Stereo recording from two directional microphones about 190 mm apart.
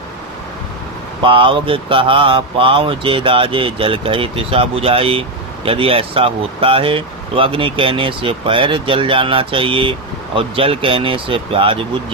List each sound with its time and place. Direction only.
1.2 s speech: 25° right (ahead or behind)